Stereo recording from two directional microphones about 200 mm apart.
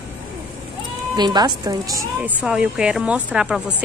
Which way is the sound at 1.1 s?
20° right (ahead or behind).